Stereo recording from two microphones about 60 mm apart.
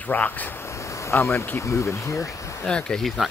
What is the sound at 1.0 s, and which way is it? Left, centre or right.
Speech, left.